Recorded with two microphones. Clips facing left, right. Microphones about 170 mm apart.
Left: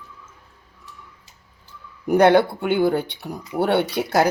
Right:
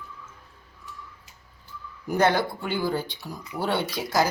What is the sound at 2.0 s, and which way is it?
Speech, 60° left (ahead or behind).